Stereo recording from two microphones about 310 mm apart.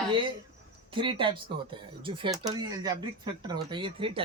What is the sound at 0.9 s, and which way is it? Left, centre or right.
Speech, centre.